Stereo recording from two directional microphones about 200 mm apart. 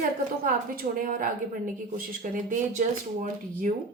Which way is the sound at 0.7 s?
45° right (ahead or behind).